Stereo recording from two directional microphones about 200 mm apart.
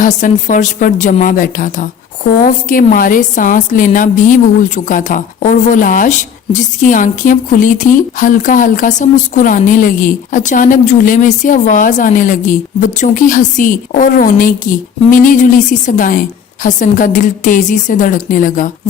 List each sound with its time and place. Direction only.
0.0 s a woman's voice: 40° left (ahead or behind)